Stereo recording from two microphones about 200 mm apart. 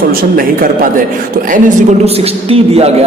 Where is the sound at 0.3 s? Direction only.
45° right (ahead or behind).